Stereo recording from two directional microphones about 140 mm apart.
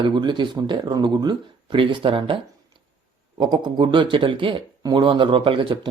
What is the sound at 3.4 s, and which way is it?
Speech, 30° right (ahead or behind).